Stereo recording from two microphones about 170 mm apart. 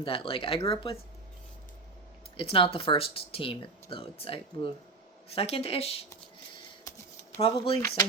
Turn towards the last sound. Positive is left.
turn(degrees=30)  # may be behind; listen again after turning